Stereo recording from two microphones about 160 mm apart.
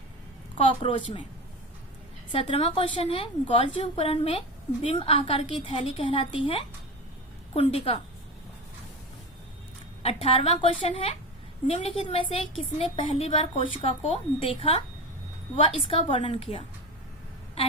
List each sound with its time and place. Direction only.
0.5 s a woman's voice: 35° left (ahead or behind)
2.3 s a woman's voice: 35° left (ahead or behind)
10.0 s a woman's voice: 40° left (ahead or behind)